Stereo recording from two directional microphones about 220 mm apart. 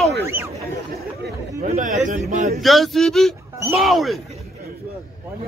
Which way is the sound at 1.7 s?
35° right (ahead or behind).